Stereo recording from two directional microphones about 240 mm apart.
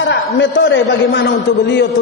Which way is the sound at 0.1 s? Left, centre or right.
Left.